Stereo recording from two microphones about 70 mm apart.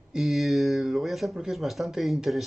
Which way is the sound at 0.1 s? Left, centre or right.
Centre.